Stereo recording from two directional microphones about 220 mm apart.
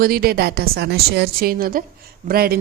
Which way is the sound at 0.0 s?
45° right (ahead or behind).